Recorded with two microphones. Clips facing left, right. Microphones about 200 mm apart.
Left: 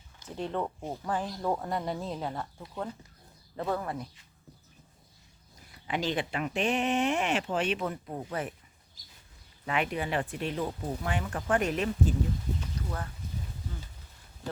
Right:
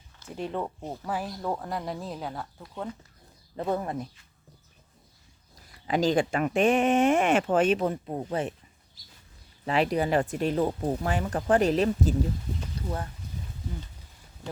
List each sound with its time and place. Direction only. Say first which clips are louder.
0.3 s speech: right 1 dB; 10° right (ahead or behind)
3.6 s speech: right 3 dB; 20° right (ahead or behind)
5.9 s speech: right 7 dB; 40° right (ahead or behind)
7.9 s speech: right 6 dB; 25° right (ahead or behind)
9.6 s speech: right 6 dB; 35° right (ahead or behind)